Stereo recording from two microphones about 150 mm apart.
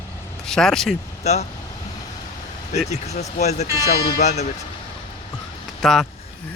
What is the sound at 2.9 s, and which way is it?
Speech, 50° left (ahead or behind).